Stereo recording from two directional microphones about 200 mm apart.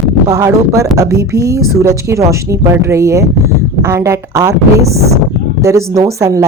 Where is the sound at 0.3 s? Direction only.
15° right (ahead or behind).